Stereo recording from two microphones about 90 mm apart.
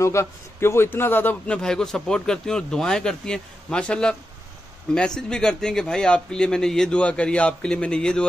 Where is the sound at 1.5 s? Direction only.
5° left (ahead or behind).